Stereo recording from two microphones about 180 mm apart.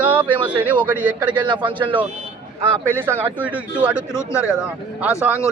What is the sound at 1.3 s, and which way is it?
Speech, 25° right (ahead or behind).